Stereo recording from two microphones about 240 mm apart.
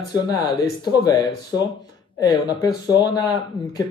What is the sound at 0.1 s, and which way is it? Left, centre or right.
Speech, centre.